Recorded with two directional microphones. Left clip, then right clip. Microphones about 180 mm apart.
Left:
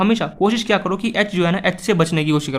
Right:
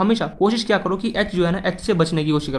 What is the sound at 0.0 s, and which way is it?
Speech, 20° left (ahead or behind).